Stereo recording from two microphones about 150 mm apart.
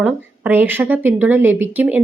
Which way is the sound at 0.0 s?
10° right (ahead or behind).